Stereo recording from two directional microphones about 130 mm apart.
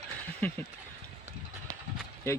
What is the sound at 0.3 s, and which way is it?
Speech, 10° left (ahead or behind).